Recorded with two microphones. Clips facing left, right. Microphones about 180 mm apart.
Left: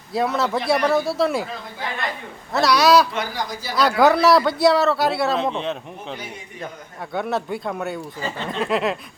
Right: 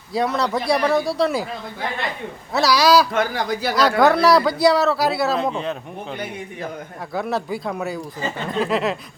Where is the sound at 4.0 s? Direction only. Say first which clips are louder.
Left 1 dB; centre (ahead or behind).